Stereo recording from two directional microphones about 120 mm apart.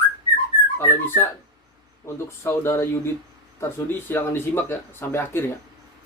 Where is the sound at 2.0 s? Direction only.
20° left (ahead or behind).